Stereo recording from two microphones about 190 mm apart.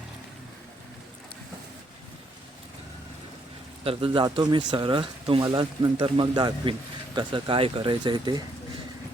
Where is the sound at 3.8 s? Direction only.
30° right (ahead or behind).